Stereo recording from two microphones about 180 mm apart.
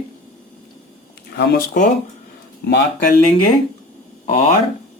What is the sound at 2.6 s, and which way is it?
Speech, 65° left (ahead or behind).